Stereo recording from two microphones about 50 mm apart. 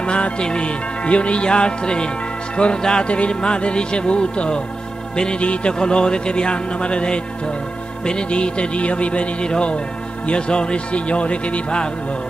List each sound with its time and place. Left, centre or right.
0.0 s speech: left